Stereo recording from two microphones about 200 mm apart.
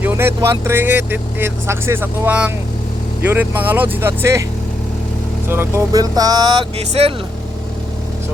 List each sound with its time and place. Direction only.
0.0 s speech: 10° right (ahead or behind)
5.5 s speech: 15° right (ahead or behind)
6.7 s speech: 30° right (ahead or behind)